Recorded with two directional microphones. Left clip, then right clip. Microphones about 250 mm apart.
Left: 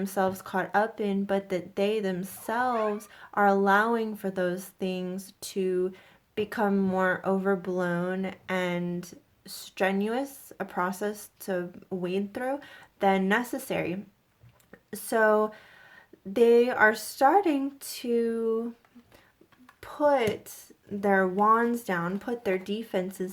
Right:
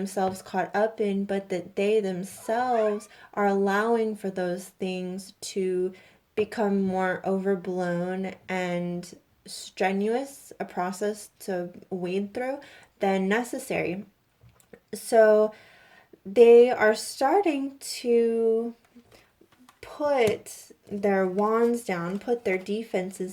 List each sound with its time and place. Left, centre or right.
0.0 s speech: centre
19.8 s a sound: centre
20.1 s speech: centre